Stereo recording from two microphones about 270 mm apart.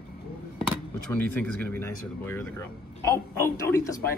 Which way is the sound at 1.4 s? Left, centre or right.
Centre.